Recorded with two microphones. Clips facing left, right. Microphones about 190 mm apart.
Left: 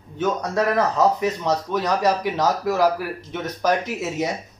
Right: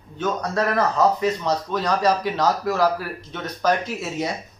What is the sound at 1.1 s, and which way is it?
Speech, 15° left (ahead or behind).